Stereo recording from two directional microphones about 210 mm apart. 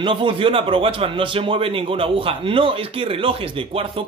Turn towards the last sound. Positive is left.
turn(degrees=-25)  # may be behind; listen again after turning